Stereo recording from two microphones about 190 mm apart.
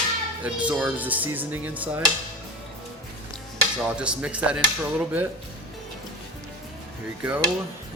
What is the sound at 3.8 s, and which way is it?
Speech, 5° right (ahead or behind).